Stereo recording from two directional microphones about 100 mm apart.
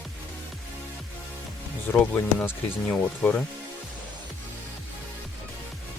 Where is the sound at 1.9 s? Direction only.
20° left (ahead or behind).